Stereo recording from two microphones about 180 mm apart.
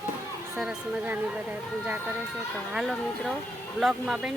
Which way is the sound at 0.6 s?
5° right (ahead or behind).